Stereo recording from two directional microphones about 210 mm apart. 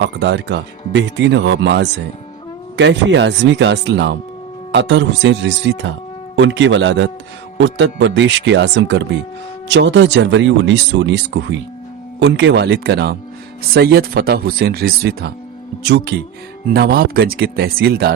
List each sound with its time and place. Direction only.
0.0 s speech: 60° right (ahead or behind)